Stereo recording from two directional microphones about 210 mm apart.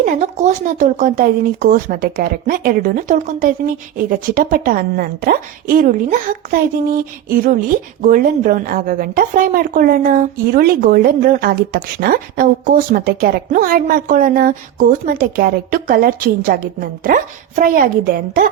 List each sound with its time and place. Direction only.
0.0 s a woman's voice: 35° right (ahead or behind)